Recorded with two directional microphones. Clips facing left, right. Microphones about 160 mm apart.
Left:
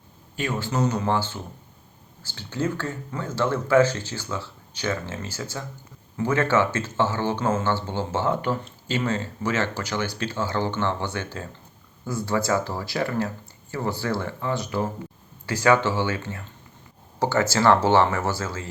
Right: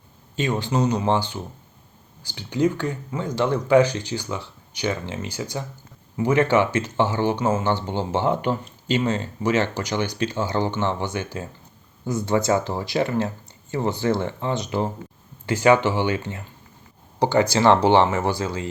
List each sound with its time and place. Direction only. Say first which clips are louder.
0.3 s speech: right 3 dB; 20° right (ahead or behind)